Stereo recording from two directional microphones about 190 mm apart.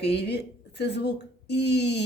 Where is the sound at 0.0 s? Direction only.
60° left (ahead or behind).